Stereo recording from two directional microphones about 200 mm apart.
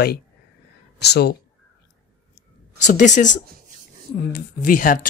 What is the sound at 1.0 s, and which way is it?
Speech, 55° left (ahead or behind).